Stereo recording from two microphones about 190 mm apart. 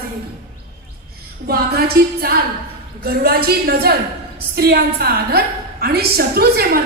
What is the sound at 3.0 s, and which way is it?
A woman's voice, 55° right (ahead or behind).